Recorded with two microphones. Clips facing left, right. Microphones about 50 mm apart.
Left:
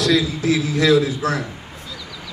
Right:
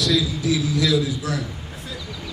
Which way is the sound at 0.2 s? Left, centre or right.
Left.